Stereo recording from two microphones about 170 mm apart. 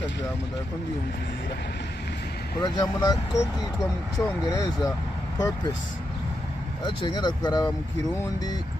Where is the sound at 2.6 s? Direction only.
20° left (ahead or behind).